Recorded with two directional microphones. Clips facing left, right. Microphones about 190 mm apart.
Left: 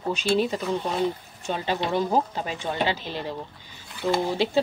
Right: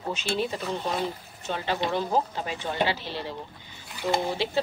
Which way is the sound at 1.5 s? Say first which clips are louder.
Left 2 dB; 15° left (ahead or behind).